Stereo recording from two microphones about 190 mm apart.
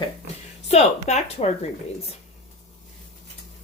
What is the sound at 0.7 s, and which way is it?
Speech, 35° left (ahead or behind).